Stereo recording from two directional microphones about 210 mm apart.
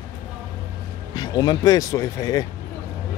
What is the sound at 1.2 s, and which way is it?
A man's voice, 20° left (ahead or behind).